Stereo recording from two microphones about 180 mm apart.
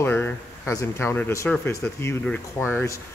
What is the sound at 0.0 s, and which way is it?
Speech, 10° left (ahead or behind).